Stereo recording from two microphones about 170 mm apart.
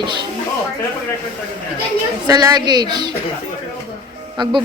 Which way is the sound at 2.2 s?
20° right (ahead or behind).